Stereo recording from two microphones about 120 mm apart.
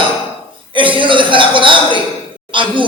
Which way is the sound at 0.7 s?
45° right (ahead or behind).